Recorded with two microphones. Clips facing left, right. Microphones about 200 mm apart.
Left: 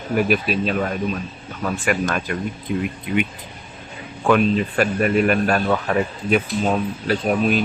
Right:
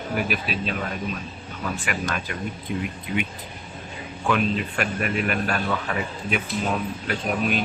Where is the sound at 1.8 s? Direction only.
45° left (ahead or behind).